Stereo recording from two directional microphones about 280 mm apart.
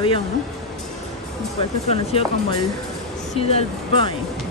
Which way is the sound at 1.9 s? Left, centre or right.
Left.